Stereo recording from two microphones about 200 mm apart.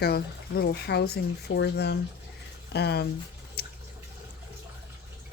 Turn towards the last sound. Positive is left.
turn(degrees=50)  # may be behind; listen again after turning